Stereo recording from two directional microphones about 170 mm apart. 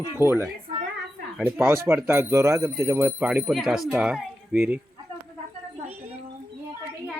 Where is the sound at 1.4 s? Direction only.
10° right (ahead or behind).